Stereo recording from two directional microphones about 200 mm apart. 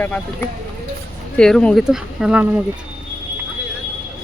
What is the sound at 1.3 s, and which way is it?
Speech, 5° left (ahead or behind).